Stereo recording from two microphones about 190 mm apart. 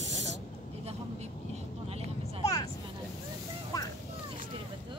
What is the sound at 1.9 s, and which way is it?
Vehicle, 30° right (ahead or behind).